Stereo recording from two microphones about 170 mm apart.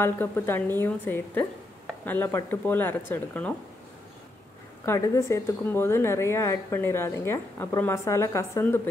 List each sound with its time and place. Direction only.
0.0 s a woman's voice: 10° left (ahead or behind)
4.8 s a woman's voice: 15° left (ahead or behind)